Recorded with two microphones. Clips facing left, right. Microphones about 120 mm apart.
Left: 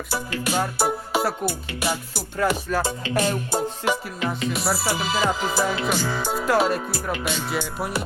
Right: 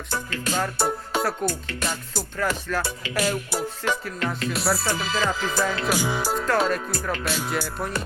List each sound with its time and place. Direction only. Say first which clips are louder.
0.1 s music: left 2 dB; 10° left (ahead or behind)
3.0 s music: left 2 dB; 30° left (ahead or behind)
3.8 s music: left 2 dB; 5° left (ahead or behind)
5.9 s speech: even; 10° right (ahead or behind)
6.3 s music: left 3 dB; 5° left (ahead or behind)